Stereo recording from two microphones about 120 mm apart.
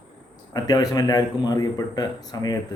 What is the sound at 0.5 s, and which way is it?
Speech, 30° left (ahead or behind).